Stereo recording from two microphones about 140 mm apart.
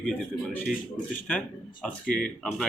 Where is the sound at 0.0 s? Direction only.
10° left (ahead or behind).